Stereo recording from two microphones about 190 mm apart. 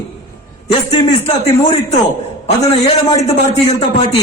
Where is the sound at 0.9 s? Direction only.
35° left (ahead or behind).